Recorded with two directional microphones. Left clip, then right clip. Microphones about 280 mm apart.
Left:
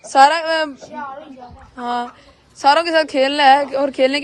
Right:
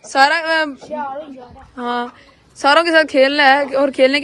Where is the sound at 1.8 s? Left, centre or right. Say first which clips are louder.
Right 1 dB; centre.